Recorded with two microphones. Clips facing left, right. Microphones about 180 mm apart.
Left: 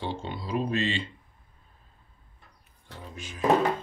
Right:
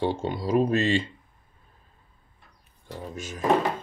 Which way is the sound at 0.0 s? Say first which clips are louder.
Right 7 dB; 45° right (ahead or behind).